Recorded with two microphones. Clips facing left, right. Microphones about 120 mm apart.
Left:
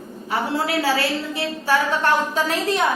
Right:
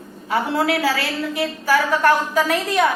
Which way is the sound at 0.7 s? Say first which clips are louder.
Even; 25° left (ahead or behind).